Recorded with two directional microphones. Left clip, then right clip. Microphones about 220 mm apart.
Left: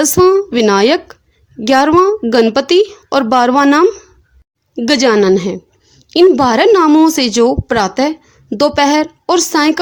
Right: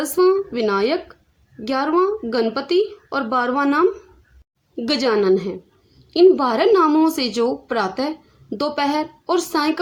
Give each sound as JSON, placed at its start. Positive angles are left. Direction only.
{"t": 0.0, "sound": "speech", "side_deg": 35}